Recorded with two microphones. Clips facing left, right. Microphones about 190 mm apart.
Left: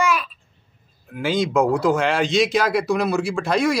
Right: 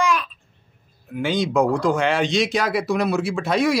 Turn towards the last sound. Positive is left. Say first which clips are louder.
# even
turn(degrees=0)  # may be behind; listen again after turning